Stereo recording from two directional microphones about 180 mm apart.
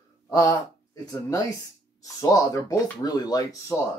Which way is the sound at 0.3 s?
20° left (ahead or behind).